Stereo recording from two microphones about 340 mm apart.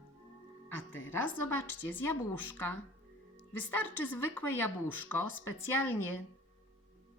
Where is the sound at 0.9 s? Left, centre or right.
Left.